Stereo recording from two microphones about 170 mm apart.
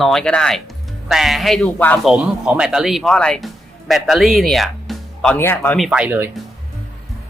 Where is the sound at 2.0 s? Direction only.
5° right (ahead or behind); by 5.8 s 10° left (ahead or behind).